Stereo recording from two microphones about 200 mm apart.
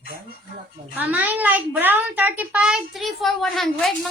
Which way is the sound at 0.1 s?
50° right (ahead or behind).